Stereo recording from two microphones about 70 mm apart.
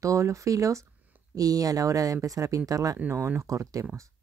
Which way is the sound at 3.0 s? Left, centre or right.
Right.